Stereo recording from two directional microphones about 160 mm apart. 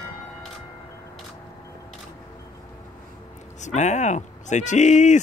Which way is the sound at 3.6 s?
45° left (ahead or behind).